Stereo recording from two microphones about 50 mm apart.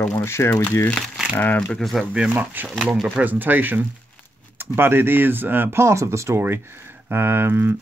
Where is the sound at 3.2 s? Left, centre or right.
Right.